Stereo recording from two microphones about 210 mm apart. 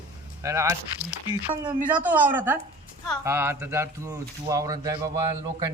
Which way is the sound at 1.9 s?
10° right (ahead or behind).